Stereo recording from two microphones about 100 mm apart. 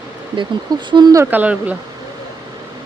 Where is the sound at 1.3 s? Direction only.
15° right (ahead or behind).